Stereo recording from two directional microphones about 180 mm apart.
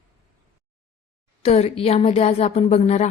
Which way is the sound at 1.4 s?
35° left (ahead or behind).